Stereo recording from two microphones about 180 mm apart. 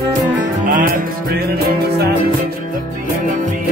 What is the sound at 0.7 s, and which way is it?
Music, 50° right (ahead or behind).